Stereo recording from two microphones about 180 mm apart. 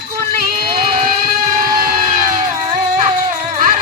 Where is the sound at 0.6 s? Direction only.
35° right (ahead or behind).